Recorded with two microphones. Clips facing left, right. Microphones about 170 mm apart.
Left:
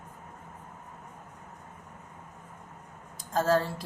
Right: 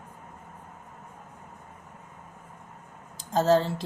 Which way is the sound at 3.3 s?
25° right (ahead or behind).